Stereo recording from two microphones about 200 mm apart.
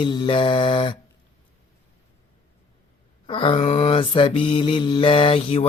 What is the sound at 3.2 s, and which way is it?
Mantra, 25° left (ahead or behind).